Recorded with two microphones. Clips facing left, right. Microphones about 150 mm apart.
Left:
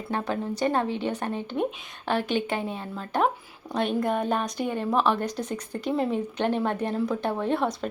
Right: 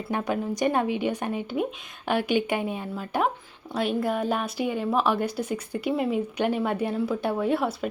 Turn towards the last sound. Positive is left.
turn(degrees=-5)  # may be behind; listen again after turning